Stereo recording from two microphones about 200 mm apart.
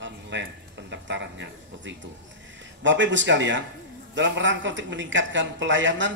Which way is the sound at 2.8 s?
65° right (ahead or behind).